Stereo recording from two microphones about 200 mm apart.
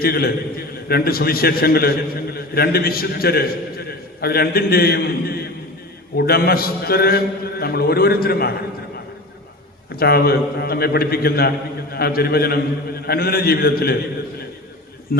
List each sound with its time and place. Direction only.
0.0 s a man's voice: 50° left (ahead or behind)
9.9 s a man's voice: 50° left (ahead or behind)
15.1 s a sound: 50° left (ahead or behind)